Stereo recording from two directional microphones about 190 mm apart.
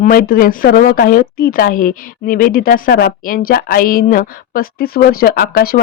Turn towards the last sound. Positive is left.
turn(degrees=50)  # may be behind; listen again after turning